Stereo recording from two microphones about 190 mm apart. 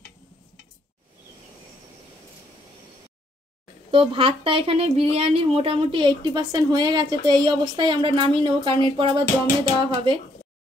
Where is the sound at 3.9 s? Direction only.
30° right (ahead or behind).